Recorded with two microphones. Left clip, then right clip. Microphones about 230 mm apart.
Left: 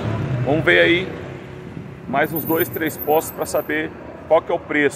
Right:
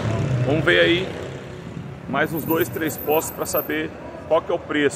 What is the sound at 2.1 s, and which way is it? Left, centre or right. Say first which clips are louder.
Speech: left 2 dB; centre.